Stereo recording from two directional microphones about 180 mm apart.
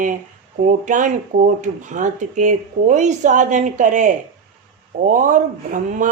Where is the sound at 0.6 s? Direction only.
45° right (ahead or behind).